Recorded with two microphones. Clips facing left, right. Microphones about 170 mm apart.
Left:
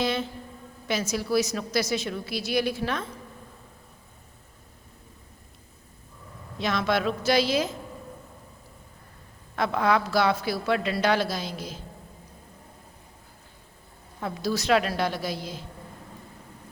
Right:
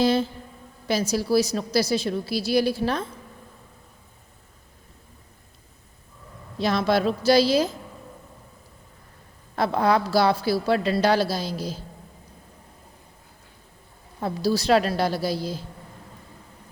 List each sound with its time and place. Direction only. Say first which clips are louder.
0.0 s a sound: right 6 dB; 35° right (ahead or behind)
0.9 s a woman's voice: right 4 dB; 35° right (ahead or behind)
6.6 s a woman's voice: right 4 dB; 35° right (ahead or behind)
9.6 s a woman's voice: right 3 dB; 35° right (ahead or behind)
14.2 s a woman's voice: right 5 dB; 35° right (ahead or behind)